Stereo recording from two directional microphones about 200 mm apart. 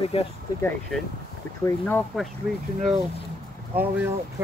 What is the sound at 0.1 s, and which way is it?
Speech, 30° left (ahead or behind).